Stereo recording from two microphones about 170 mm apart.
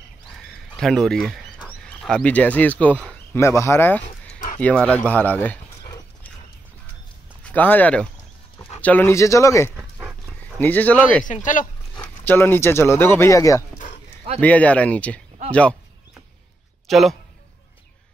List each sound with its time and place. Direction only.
0.4 s speech: 5° left (ahead or behind)
7.4 s speech: 10° left (ahead or behind)
9.8 s dog: 5° right (ahead or behind)
10.4 s speech: 10° left (ahead or behind)
11.2 s speech: 50° left (ahead or behind)
11.9 s speech: 10° left (ahead or behind)
16.8 s a man's voice: centre (ahead or behind)